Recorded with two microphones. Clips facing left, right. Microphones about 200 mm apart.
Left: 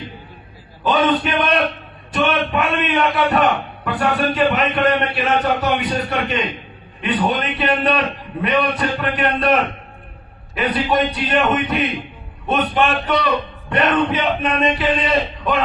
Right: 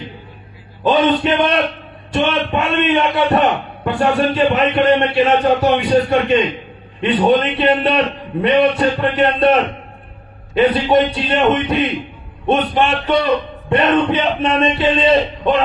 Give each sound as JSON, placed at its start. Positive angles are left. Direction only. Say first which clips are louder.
{"t": 0.9, "sound": "a man's voice", "louder": "right 3 dB", "side_deg": -25}